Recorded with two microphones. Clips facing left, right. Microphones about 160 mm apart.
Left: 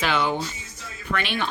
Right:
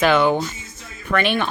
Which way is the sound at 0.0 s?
50° right (ahead or behind).